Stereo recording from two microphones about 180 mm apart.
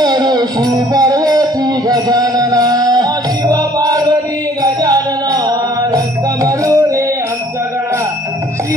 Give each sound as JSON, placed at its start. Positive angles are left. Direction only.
{"t": 0.0, "sound": "music", "side_deg": -25}